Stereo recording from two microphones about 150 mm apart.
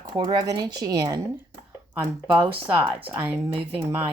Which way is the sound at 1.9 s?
10° right (ahead or behind).